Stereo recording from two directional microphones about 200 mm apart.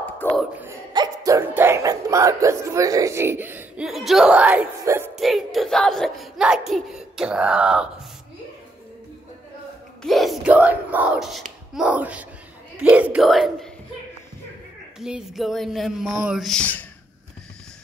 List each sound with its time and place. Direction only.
0.2 s a sound: 5° left (ahead or behind)
0.6 s music: 15° right (ahead or behind)
5.1 s speech: centre (ahead or behind)
10.0 s a child's voice: centre (ahead or behind)
15.0 s speech: centre (ahead or behind)